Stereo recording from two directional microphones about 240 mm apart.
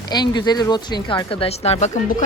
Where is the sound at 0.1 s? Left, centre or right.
Centre.